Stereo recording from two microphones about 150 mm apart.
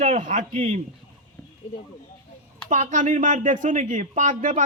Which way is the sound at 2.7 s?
55° right (ahead or behind).